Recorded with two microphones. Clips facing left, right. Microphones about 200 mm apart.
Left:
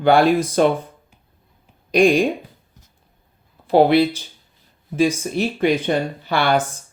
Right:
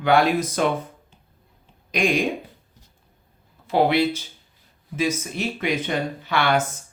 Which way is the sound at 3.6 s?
35° left (ahead or behind).